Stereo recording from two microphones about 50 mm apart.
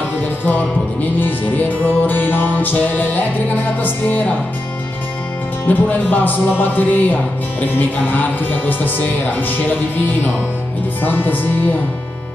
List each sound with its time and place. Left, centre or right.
1.2 s music: left
5.7 s music: left